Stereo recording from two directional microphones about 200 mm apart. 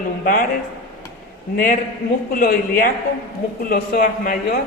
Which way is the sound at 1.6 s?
45° left (ahead or behind).